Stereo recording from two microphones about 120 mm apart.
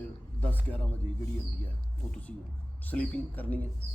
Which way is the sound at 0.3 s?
15° left (ahead or behind).